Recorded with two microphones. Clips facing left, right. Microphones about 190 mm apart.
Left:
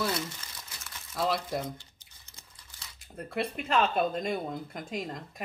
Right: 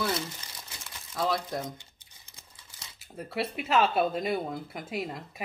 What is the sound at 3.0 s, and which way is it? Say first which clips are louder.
Speech: even; 5° right (ahead or behind).